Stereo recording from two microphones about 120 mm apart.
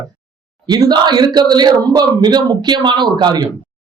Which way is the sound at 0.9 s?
35° right (ahead or behind).